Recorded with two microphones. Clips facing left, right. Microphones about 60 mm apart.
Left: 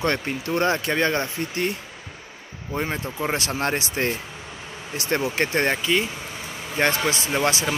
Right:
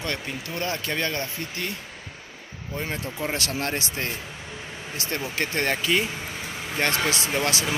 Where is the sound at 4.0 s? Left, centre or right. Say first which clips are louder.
Left 6 dB; left.